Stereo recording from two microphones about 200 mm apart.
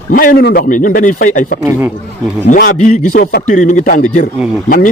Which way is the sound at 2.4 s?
40° left (ahead or behind).